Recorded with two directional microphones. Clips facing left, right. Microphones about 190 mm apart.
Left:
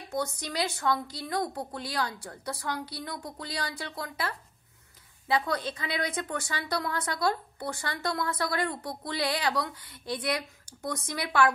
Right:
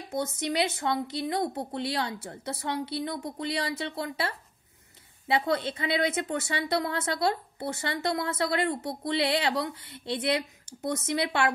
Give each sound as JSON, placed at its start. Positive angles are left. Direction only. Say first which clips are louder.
{"t": 0.1, "sound": "a woman's voice", "louder": "right 3 dB", "side_deg": -20}
{"t": 5.5, "sound": "a woman's voice", "louder": "right 4 dB", "side_deg": -25}